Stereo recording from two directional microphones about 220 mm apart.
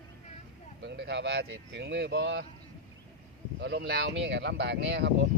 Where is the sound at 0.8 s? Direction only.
50° right (ahead or behind).